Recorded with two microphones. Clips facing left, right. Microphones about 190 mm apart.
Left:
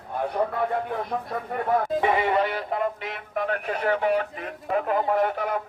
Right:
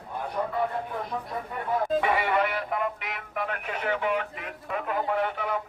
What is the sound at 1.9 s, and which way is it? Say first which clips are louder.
Speech: left 2 dB; 20° left (ahead or behind).